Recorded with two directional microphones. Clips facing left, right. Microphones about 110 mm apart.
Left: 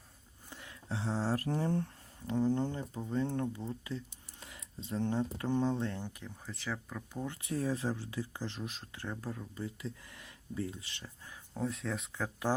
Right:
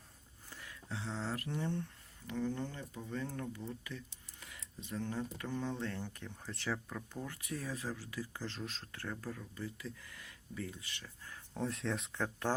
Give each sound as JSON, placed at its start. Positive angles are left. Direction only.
{"t": 0.5, "sound": "speech", "side_deg": 25}
{"t": 6.2, "sound": "speech", "side_deg": 0}
{"t": 7.4, "sound": "speech", "side_deg": 30}
{"t": 11.3, "sound": "speech", "side_deg": 5}